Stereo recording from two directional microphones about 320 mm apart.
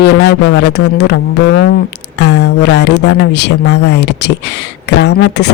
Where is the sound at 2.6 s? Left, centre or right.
Left.